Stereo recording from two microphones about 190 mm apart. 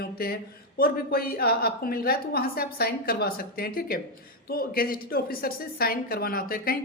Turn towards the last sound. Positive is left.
turn(degrees=50)  # may be behind; listen again after turning